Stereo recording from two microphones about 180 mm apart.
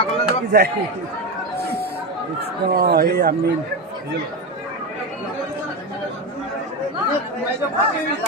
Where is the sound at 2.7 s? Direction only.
55° right (ahead or behind).